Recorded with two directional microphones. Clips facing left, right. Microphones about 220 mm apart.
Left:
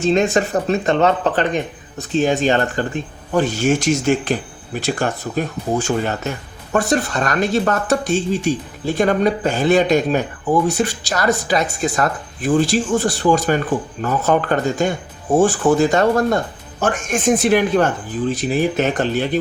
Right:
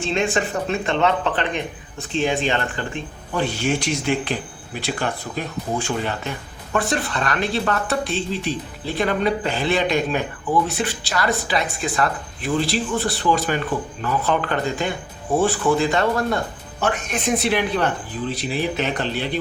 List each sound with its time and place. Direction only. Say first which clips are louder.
0.0 s speech: left 6 dB; 40° left (ahead or behind)